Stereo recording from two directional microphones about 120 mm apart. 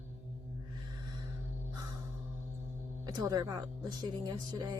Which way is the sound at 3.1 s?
30° right (ahead or behind).